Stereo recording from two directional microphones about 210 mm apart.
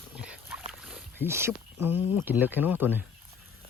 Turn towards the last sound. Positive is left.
turn(degrees=-10)  # may be behind; listen again after turning